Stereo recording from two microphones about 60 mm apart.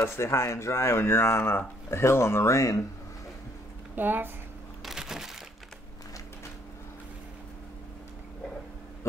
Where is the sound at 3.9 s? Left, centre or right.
Right.